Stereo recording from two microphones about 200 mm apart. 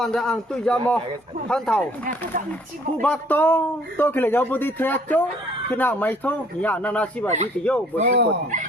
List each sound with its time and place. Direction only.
0.0 s a man's voice: centre (ahead or behind)
3.0 s speech: 10° left (ahead or behind)
8.0 s speech: 40° right (ahead or behind)